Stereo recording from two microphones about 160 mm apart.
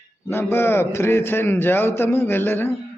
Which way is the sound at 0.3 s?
15° left (ahead or behind).